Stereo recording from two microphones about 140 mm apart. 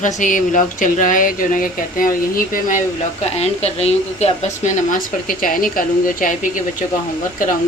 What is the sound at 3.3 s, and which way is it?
Speech, 50° left (ahead or behind).